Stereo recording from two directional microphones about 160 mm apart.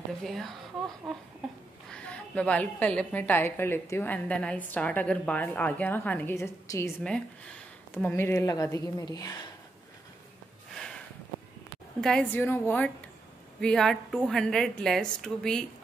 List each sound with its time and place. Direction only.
0.2 s a woman's voice: centre (ahead or behind)
1.9 s a woman's voice: 5° left (ahead or behind); by 9.5 s 25° left (ahead or behind)
10.7 s a sound: 5° left (ahead or behind)
12.0 s a woman's voice: 5° left (ahead or behind)